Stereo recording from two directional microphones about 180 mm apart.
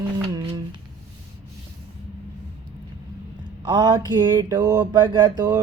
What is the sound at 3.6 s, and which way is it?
Speech, 25° right (ahead or behind).